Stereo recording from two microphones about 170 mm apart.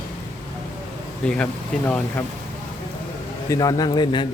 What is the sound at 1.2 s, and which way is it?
Speech, 5° left (ahead or behind).